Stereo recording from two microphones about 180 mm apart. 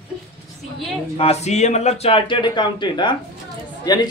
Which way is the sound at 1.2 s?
35° left (ahead or behind).